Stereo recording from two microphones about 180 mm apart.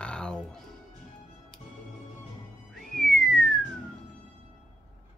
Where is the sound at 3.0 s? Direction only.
Centre (ahead or behind).